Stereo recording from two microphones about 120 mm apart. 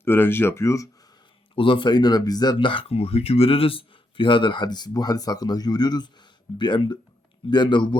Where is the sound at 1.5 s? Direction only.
45° left (ahead or behind).